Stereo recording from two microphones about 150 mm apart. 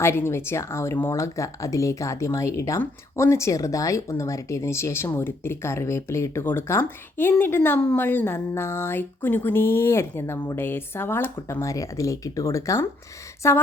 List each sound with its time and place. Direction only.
0.0 s speech: 15° left (ahead or behind)